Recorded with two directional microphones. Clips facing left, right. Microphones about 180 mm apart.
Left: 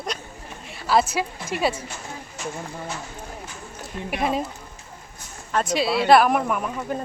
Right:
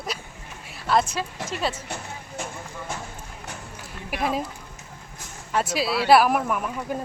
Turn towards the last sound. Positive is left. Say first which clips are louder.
# left 1 dB
turn(degrees=0)  # may be behind; listen again after turning